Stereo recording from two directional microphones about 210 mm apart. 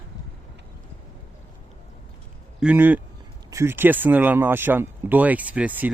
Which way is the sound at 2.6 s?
5° right (ahead or behind).